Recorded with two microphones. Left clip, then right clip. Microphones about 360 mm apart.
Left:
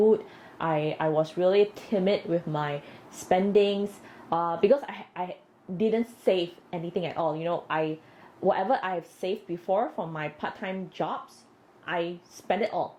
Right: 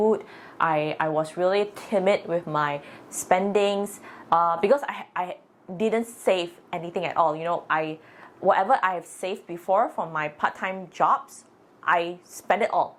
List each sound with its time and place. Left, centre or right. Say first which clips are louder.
0.6 s a woman's voice: right 4 dB; right